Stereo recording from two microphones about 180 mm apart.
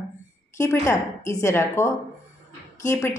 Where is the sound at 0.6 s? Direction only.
15° left (ahead or behind).